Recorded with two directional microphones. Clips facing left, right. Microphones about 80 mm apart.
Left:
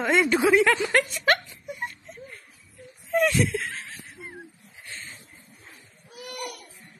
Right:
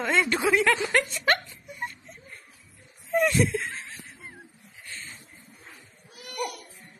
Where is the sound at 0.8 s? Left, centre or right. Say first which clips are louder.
Left 2 dB; centre.